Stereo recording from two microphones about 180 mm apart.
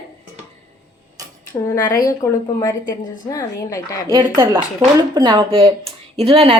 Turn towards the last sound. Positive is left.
turn(degrees=-30)  # may be behind; listen again after turning